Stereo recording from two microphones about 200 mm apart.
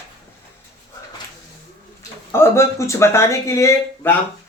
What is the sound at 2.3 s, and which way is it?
Speech, 15° left (ahead or behind).